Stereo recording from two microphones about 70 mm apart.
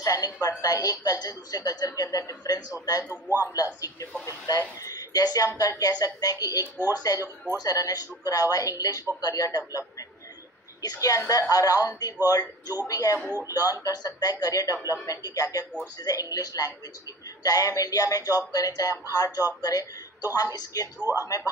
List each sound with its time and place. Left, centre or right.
0.0 s a woman's voice: left
3.1 s a man's voice: right
4.3 s a woman's voice: left
21.0 s speech: right